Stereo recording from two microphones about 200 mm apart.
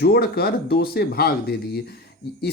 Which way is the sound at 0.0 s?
50° left (ahead or behind).